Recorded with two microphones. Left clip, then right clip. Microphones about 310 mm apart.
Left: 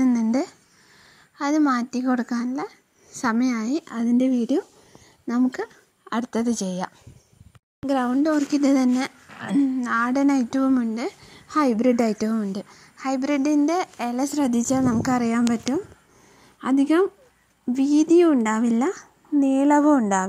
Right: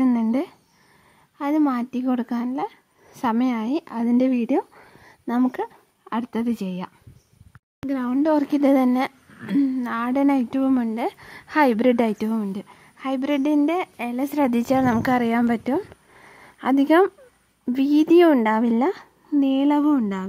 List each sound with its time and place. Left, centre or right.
0.0 s a sound: right
1.4 s a woman's voice: centre
2.5 s a sound: centre
3.4 s a woman's voice: centre
5.2 s speech: right
5.6 s a sound: centre
6.4 s speech: centre
7.8 s speech: centre
8.7 s a woman's voice: right
10.9 s speech: right
12.1 s a woman's voice: centre